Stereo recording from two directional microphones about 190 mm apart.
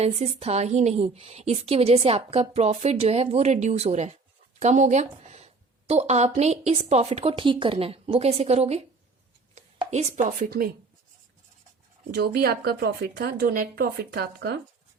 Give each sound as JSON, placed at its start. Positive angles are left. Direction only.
{"t": 0.0, "sound": "a woman's voice", "side_deg": -35}
{"t": 12.1, "sound": "a woman's voice", "side_deg": -55}